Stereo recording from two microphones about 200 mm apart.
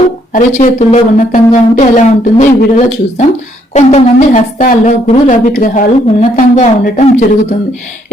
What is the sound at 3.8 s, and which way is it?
A woman's voice, 35° left (ahead or behind).